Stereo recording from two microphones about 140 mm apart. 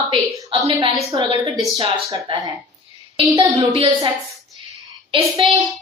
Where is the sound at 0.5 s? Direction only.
35° right (ahead or behind).